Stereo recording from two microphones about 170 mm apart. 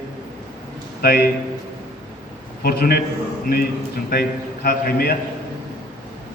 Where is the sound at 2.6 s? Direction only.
65° left (ahead or behind).